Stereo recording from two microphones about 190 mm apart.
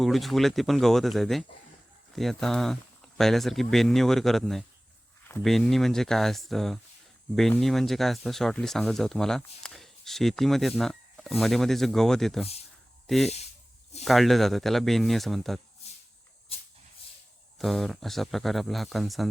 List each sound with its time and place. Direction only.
0.0 s speech: centre (ahead or behind)
16.5 s dog: 30° left (ahead or behind)
17.6 s speech: centre (ahead or behind)